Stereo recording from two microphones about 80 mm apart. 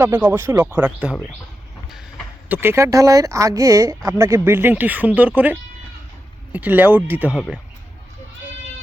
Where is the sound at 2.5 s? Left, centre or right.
Right.